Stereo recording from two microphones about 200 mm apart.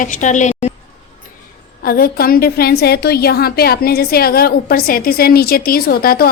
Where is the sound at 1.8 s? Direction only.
50° left (ahead or behind).